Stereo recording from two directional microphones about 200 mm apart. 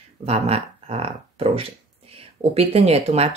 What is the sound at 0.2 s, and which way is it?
Speech, 30° right (ahead or behind).